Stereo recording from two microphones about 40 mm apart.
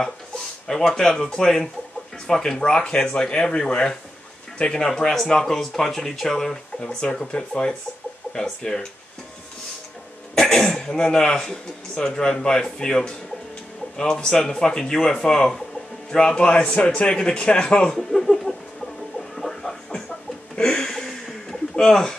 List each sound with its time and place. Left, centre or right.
0.7 s a man's voice: centre
2.6 s a man's voice: left
6.8 s a man's voice: left
10.3 s cough: centre
10.7 s a man's voice: centre
17.9 s speech: centre
19.1 s a sound: centre
20.5 s a sound: centre